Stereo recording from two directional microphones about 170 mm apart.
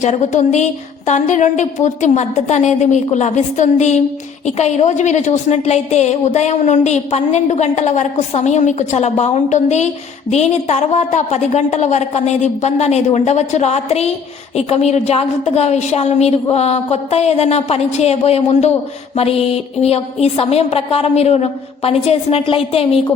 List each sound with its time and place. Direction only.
0.0 s a woman's voice: 45° left (ahead or behind)